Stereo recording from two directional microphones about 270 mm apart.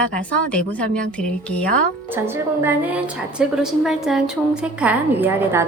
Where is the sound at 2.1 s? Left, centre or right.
Centre.